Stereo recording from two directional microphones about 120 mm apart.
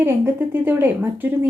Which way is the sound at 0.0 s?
20° right (ahead or behind).